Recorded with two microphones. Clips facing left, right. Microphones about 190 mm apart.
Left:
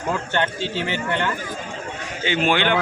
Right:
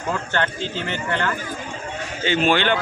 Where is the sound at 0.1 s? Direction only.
20° left (ahead or behind).